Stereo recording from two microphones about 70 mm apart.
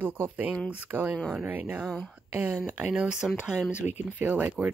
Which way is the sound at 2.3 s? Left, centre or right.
Right.